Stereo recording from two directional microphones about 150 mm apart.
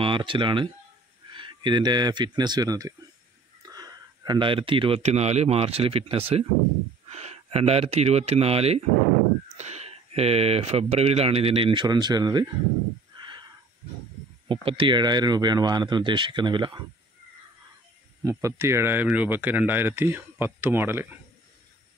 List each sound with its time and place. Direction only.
0.0 s speech: 35° right (ahead or behind)
13.2 s a sound: 30° right (ahead or behind)
14.5 s speech: 35° right (ahead or behind)
18.2 s speech: 20° right (ahead or behind)